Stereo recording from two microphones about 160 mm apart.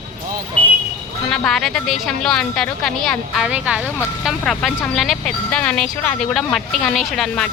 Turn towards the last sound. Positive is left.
turn(degrees=5)  # may be behind; listen again after turning